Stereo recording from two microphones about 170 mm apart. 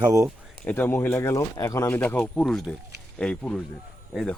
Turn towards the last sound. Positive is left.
turn(degrees=5)  # may be behind; listen again after turning